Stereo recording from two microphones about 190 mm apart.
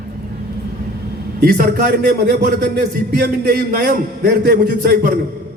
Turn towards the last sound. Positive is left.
turn(degrees=-55)  # may be behind; listen again after turning